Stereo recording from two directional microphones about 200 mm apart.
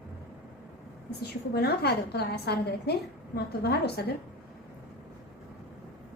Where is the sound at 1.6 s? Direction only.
55° left (ahead or behind).